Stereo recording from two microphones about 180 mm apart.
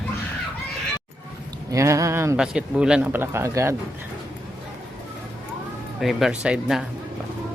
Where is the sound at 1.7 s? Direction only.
15° right (ahead or behind).